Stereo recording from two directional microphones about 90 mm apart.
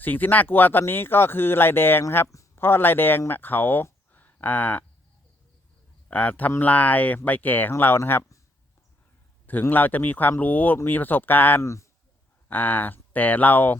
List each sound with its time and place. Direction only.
0.0 s speech: 20° left (ahead or behind)
6.1 s speech: 15° left (ahead or behind)
9.5 s speech: 20° left (ahead or behind)
11.6 s speech: 35° left (ahead or behind)
12.5 s speech: 20° left (ahead or behind)